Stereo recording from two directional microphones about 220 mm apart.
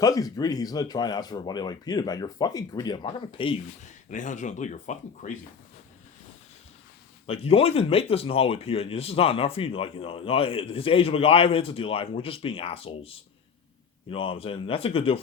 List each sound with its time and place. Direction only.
0.0 s speech: 15° left (ahead or behind)
4.1 s speech: 35° left (ahead or behind)
7.3 s speech: 25° left (ahead or behind)